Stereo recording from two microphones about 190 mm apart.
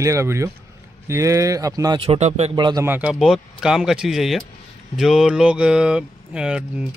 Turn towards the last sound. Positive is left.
turn(degrees=-5)  # may be behind; listen again after turning